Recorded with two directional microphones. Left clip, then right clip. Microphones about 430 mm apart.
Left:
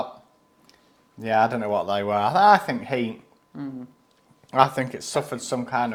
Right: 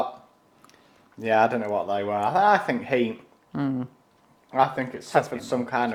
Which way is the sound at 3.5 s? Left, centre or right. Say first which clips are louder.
Right 7 dB; right.